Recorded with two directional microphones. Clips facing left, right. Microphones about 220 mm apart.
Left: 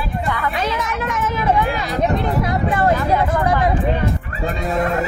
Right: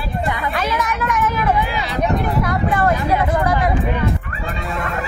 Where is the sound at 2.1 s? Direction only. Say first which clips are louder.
Even; 25° left (ahead or behind).